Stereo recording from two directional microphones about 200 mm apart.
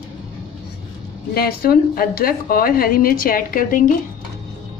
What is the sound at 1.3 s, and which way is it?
A woman's voice, 50° left (ahead or behind).